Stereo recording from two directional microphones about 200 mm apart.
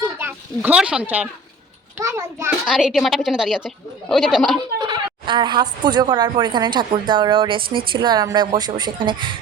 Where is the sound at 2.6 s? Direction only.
Centre (ahead or behind).